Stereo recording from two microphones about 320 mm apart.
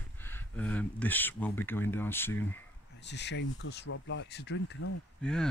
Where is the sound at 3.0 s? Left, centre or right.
Left.